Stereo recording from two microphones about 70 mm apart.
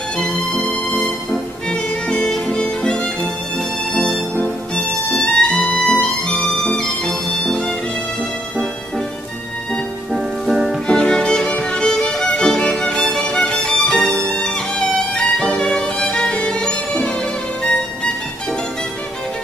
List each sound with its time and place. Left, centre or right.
1.7 s music: centre
10.1 s music: centre
10.9 s music: centre